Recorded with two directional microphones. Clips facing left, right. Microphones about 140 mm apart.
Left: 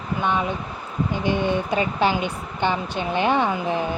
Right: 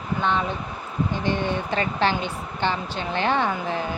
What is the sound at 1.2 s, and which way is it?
A woman's voice, 15° left (ahead or behind).